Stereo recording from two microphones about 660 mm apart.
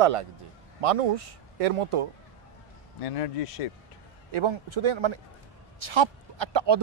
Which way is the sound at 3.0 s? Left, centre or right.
Left.